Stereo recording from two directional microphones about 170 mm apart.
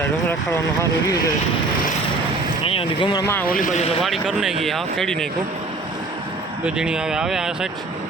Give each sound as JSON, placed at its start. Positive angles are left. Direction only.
{"t": 0.0, "sound": "speech", "side_deg": 15}
{"t": 2.6, "sound": "speech", "side_deg": 30}
{"t": 3.5, "sound": "speech", "side_deg": 50}
{"t": 4.0, "sound": "speech", "side_deg": 0}
{"t": 6.7, "sound": "speech", "side_deg": -5}